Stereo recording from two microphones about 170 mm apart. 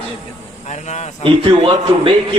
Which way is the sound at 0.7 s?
40° left (ahead or behind).